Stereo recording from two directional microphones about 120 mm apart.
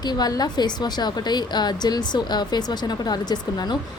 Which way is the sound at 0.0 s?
35° left (ahead or behind).